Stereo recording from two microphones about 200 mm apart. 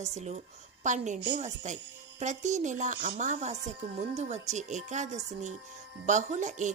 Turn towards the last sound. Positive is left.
turn(degrees=-35)  # may be behind; listen again after turning